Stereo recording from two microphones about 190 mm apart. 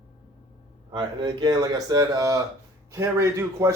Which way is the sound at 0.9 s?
25° right (ahead or behind).